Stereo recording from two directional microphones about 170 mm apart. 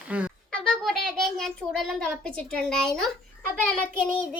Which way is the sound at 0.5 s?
5° left (ahead or behind).